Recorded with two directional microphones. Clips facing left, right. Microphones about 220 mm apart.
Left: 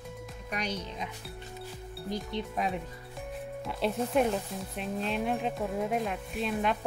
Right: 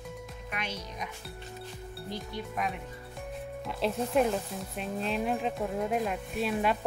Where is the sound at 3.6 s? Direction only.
Centre (ahead or behind).